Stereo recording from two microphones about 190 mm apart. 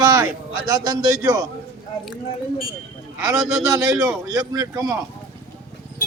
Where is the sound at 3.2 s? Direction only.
20° right (ahead or behind).